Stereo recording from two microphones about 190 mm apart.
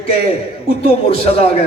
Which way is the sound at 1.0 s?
30° left (ahead or behind).